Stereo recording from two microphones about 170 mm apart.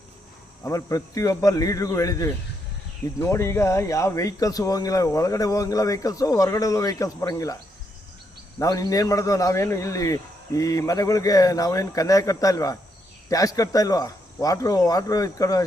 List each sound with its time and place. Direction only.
0.6 s speech: 20° left (ahead or behind)